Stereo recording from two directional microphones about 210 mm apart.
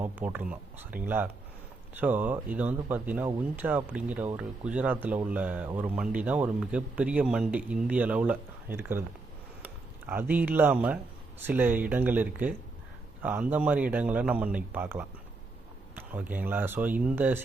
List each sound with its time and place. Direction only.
0.0 s speech: 10° right (ahead or behind)